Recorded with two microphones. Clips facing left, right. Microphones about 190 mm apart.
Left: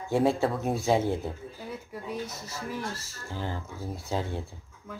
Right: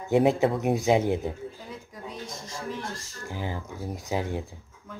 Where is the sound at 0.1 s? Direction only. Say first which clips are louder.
Right 3 dB; 20° right (ahead or behind).